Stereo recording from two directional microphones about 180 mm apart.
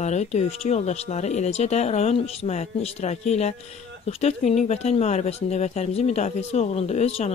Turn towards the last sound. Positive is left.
turn(degrees=35)  # may be behind; listen again after turning